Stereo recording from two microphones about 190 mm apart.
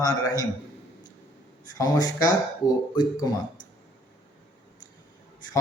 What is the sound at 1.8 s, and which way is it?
A man's voice, 20° left (ahead or behind).